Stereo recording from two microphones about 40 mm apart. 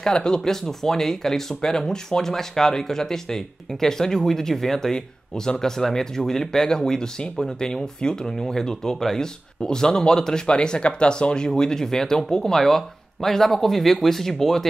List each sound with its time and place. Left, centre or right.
0.0 s speech: centre
0.4 s speech: centre